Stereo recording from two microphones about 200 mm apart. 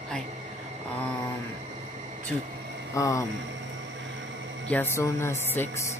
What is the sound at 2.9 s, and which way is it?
Speech, 15° left (ahead or behind).